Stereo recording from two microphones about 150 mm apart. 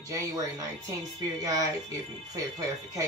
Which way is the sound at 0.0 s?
25° right (ahead or behind).